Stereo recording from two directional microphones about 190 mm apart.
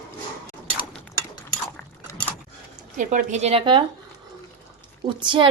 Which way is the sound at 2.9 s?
40° right (ahead or behind).